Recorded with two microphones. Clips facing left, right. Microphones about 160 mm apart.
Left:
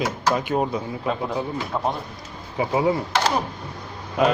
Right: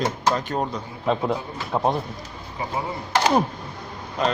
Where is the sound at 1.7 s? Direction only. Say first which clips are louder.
Right 4 dB; 25° right (ahead or behind).